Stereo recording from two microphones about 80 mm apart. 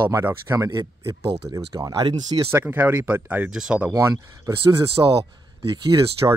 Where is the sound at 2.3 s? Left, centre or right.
Right.